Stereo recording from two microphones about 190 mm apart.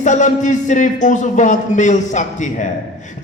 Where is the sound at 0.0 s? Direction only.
40° left (ahead or behind).